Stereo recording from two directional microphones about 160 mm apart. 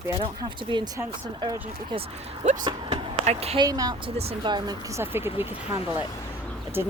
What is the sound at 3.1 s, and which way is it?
Speech, 40° right (ahead or behind).